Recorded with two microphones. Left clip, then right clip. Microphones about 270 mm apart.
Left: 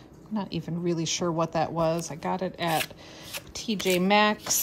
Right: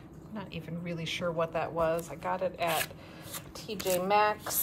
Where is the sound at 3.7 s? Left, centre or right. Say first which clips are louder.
Left 7 dB; left.